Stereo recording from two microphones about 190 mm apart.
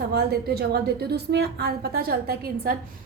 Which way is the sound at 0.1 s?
55° right (ahead or behind).